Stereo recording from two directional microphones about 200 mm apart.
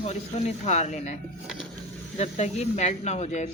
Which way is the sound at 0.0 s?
35° left (ahead or behind).